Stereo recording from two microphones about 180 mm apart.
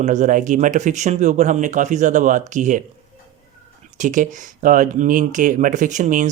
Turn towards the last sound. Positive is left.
turn(degrees=-45)  # may be behind; listen again after turning